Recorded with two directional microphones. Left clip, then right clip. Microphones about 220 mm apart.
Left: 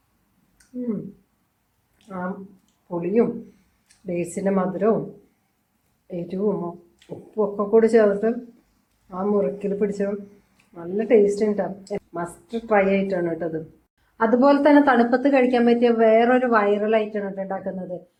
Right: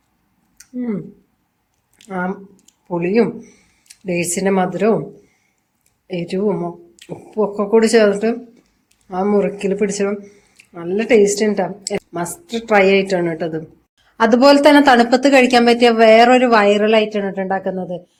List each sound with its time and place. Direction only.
3.0 s speech: 55° right (ahead or behind)
6.1 s speech: 50° right (ahead or behind)